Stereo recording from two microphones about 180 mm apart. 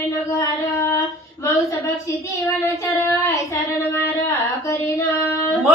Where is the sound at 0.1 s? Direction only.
15° left (ahead or behind).